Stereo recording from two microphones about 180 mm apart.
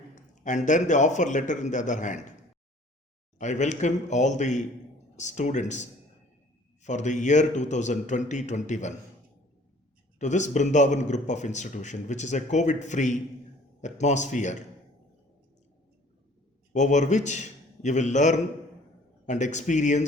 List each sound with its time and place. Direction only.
0.4 s speech: 45° left (ahead or behind)
3.3 s speech: 40° left (ahead or behind)
10.2 s speech: 40° left (ahead or behind)
16.7 s a man's voice: 40° left (ahead or behind)